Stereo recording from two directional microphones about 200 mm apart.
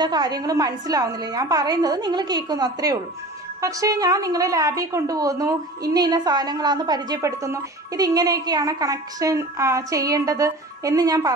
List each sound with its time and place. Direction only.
0.0 s a woman's voice: 20° right (ahead or behind)